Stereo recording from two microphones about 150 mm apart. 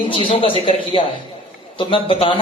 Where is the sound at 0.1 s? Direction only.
35° left (ahead or behind).